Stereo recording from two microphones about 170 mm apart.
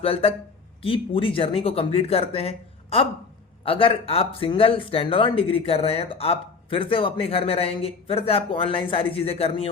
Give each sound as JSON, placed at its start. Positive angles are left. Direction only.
{"t": 0.0, "sound": "speech", "side_deg": 35}